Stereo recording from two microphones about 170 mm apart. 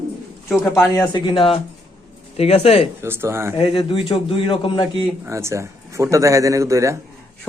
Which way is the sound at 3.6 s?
30° left (ahead or behind).